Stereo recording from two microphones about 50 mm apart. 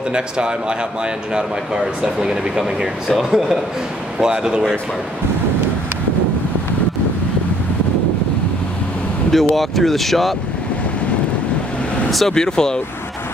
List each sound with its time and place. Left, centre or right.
0.1 s a man's voice: centre
9.3 s speech: centre
12.1 s speech: centre
12.4 s speech: centre